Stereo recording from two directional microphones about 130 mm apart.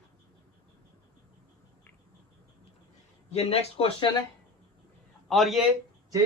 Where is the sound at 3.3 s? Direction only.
50° left (ahead or behind).